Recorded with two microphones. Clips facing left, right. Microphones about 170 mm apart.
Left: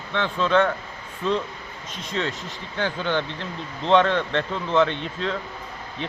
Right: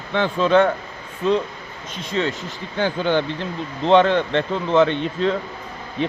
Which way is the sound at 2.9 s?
30° right (ahead or behind).